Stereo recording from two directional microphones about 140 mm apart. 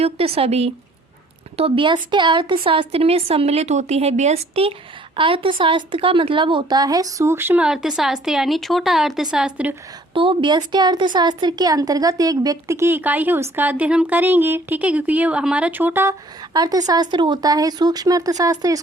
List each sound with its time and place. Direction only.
0.0 s a woman's voice: 45° right (ahead or behind); by 9.7 s 10° right (ahead or behind)
10.2 s a woman's voice: 35° right (ahead or behind); by 16.1 s 15° right (ahead or behind)
16.5 s speech: 30° right (ahead or behind)